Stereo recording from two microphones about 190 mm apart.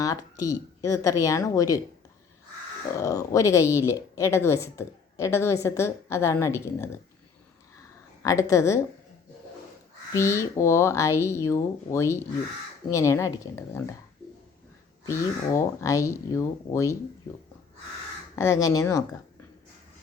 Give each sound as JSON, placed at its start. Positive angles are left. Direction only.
{"t": 0.0, "sound": "speech", "side_deg": 20}
{"t": 2.9, "sound": "speech", "side_deg": 15}
{"t": 7.8, "sound": "a sound", "side_deg": 15}
{"t": 10.1, "sound": "speech", "side_deg": 15}
{"t": 15.0, "sound": "speech", "side_deg": 15}
{"t": 18.3, "sound": "speech", "side_deg": 15}